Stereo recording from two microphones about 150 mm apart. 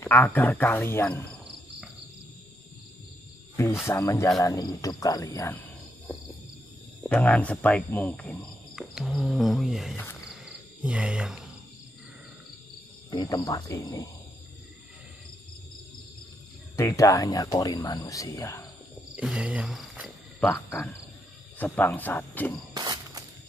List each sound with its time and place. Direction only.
0.0 s speech: 15° left (ahead or behind)
3.8 s speech: 20° left (ahead or behind)
7.0 s speech: 10° left (ahead or behind)
8.7 s speech: centre (ahead or behind)
10.3 s cricket: 5° right (ahead or behind)
13.1 s speech: 30° left (ahead or behind)
16.7 s speech: 20° left (ahead or behind)
19.1 s cricket: 5° right (ahead or behind)
20.3 s speech: 10° left (ahead or behind)
22.8 s a sound: 25° right (ahead or behind)